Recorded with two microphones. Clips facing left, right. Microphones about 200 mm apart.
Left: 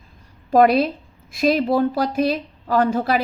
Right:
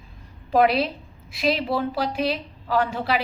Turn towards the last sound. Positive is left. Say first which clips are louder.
# left 5 dB
turn(degrees=45)  # may be behind; listen again after turning